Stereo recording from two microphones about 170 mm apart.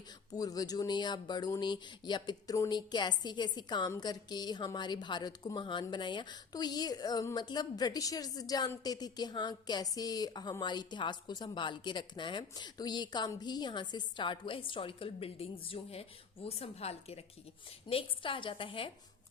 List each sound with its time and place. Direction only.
0.3 s a woman's voice: 20° left (ahead or behind)